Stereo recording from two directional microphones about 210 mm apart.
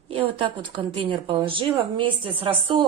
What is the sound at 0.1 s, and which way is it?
A woman's voice, 25° right (ahead or behind).